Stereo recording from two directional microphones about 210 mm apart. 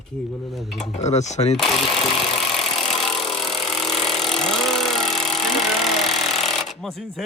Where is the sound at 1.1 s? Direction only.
30° left (ahead or behind).